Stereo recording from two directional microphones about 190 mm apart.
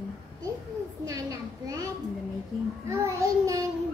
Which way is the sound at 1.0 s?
15° right (ahead or behind).